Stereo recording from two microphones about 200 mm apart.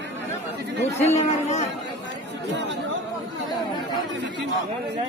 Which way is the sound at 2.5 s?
60° right (ahead or behind).